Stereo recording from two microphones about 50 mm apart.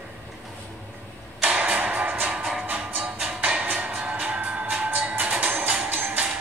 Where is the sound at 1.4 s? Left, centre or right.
Right.